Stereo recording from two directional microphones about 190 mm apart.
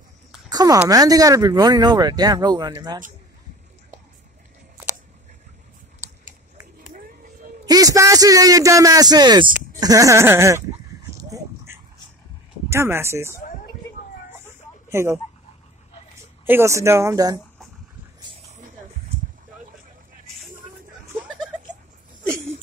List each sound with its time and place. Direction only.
0.5 s a sound: 20° right (ahead or behind)
0.8 s speech: 20° right (ahead or behind)
7.6 s speech: 20° right (ahead or behind)
11.2 s dog: 15° right (ahead or behind)
12.6 s speech: 15° right (ahead or behind)
14.9 s speech: 15° right (ahead or behind)
16.4 s speech: 15° right (ahead or behind)